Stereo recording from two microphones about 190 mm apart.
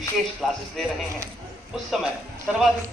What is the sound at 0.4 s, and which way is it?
Speech, centre (ahead or behind).